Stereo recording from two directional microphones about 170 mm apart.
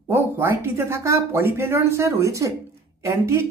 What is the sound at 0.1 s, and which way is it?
Speech, 15° right (ahead or behind).